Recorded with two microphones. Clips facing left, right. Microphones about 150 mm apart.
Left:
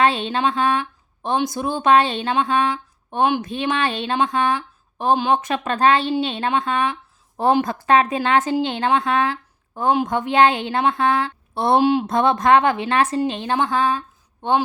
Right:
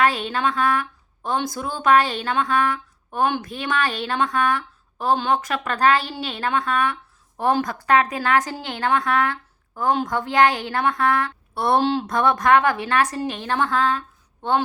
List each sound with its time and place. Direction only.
0.0 s a woman's voice: 25° left (ahead or behind)